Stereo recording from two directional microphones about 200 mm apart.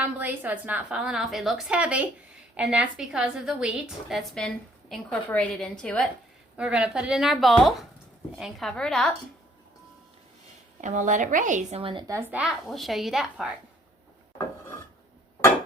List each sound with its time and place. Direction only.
0.0 s a woman's voice: 10° right (ahead or behind)
10.8 s a woman's voice: 40° right (ahead or behind)
11.8 s a woman's voice: 25° right (ahead or behind); by 13.5 s centre (ahead or behind)